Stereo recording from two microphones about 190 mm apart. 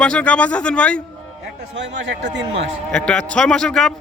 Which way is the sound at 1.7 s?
70° right (ahead or behind).